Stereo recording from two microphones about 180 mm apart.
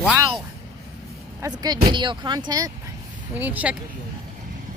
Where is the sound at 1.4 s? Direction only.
20° right (ahead or behind).